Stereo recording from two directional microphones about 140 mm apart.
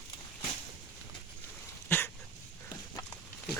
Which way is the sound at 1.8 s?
15° left (ahead or behind).